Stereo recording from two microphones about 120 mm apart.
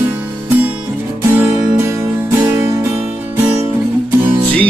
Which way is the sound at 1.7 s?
20° right (ahead or behind).